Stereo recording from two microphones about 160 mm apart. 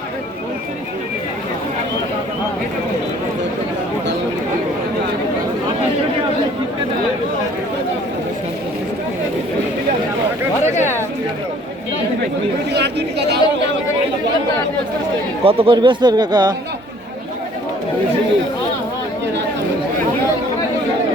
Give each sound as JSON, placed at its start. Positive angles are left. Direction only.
{"t": 10.6, "sound": "chatter", "side_deg": 50}
{"t": 12.7, "sound": "chatter", "side_deg": -90}
{"t": 15.4, "sound": "speech", "side_deg": -35}